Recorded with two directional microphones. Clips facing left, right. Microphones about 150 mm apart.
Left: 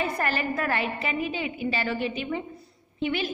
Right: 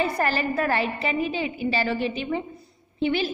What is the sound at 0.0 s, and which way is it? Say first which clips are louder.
A woman's voice: right 3 dB; 30° right (ahead or behind).